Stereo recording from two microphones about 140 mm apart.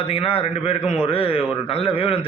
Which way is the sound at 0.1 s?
40° left (ahead or behind).